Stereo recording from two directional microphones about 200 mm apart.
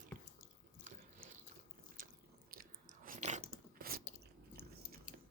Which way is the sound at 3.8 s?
45° right (ahead or behind).